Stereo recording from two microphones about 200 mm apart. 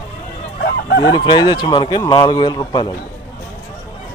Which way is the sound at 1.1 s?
20° left (ahead or behind).